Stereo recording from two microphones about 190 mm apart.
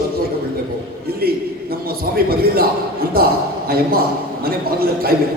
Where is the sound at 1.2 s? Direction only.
55° right (ahead or behind).